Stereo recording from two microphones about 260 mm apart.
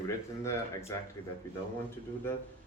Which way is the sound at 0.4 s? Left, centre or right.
Centre.